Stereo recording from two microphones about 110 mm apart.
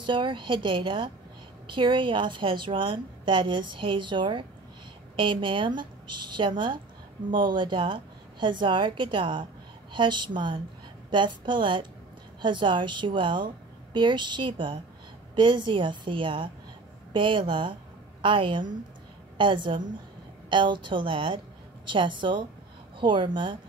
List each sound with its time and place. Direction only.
0.0 s a woman's voice: 45° right (ahead or behind)